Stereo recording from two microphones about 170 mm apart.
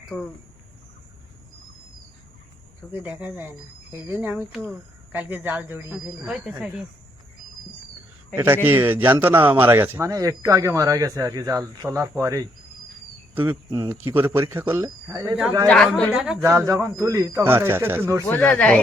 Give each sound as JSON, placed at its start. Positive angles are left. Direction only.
{"t": 2.9, "sound": "a man's voice", "side_deg": -10}
{"t": 8.4, "sound": "a man's voice", "side_deg": -10}
{"t": 15.6, "sound": "speech", "side_deg": 5}
{"t": 16.4, "sound": "a man's voice", "side_deg": -15}
{"t": 18.3, "sound": "speech", "side_deg": 10}